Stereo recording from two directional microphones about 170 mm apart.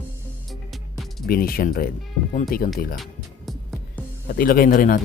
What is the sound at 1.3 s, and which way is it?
Speech, 60° left (ahead or behind).